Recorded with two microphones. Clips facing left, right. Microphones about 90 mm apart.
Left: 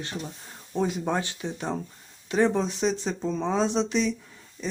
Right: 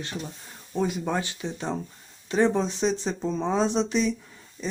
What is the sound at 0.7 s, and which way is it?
Speech, 10° right (ahead or behind).